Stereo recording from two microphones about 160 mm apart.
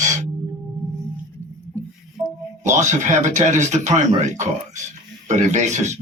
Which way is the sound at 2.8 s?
50° right (ahead or behind).